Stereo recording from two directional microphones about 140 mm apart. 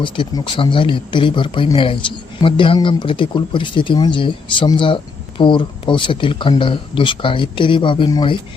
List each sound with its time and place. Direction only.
0.0 s speech: 35° left (ahead or behind)